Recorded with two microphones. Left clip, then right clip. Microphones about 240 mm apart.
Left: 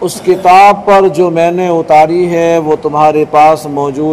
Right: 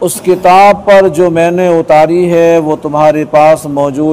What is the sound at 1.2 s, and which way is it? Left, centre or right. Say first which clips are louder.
A man's voice: right 1 dB; right.